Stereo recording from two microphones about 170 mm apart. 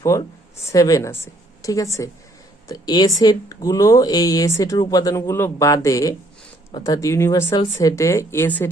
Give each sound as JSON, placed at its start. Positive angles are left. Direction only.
{"t": 0.0, "sound": "a woman's voice", "side_deg": 15}